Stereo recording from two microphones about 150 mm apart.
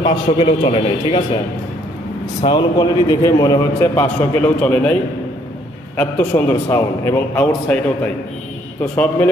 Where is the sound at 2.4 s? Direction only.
30° left (ahead or behind).